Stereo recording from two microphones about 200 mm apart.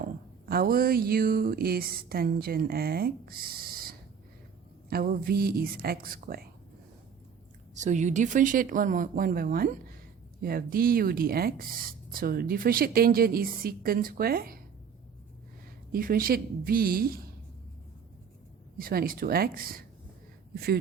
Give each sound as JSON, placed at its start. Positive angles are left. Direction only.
{"t": 0.4, "sound": "speech", "side_deg": -45}
{"t": 7.8, "sound": "speech", "side_deg": -35}
{"t": 15.9, "sound": "speech", "side_deg": -45}
{"t": 18.8, "sound": "speech", "side_deg": -45}